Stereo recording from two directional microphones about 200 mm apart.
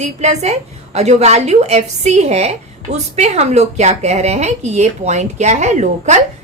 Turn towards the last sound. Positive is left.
turn(degrees=-35)  # may be behind; listen again after turning